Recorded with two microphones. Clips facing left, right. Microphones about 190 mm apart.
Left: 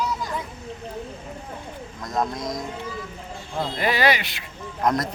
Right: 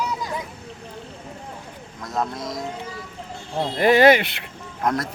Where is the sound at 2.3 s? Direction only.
5° right (ahead or behind).